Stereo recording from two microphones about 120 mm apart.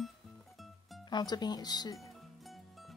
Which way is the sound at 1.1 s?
35° left (ahead or behind).